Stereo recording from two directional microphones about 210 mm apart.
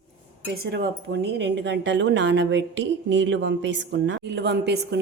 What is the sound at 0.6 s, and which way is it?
A woman's voice, 50° right (ahead or behind).